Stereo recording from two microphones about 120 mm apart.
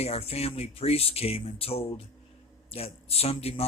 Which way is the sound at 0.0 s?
60° left (ahead or behind).